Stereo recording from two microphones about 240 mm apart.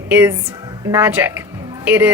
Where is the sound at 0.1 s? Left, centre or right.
Centre.